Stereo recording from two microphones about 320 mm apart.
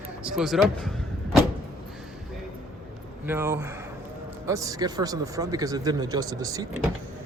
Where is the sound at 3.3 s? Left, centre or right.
Centre.